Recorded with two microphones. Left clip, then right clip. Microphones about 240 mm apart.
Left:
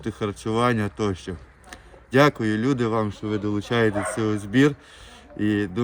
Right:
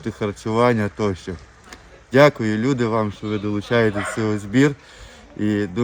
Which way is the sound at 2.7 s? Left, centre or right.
Centre.